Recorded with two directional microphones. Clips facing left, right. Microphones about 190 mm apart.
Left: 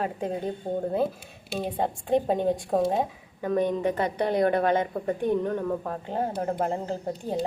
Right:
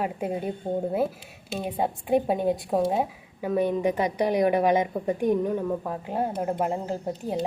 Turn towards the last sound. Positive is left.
turn(degrees=-5)  # may be behind; listen again after turning